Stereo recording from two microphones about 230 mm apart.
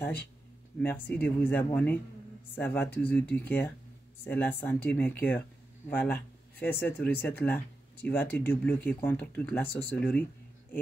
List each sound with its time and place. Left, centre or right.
1.0 s speech: centre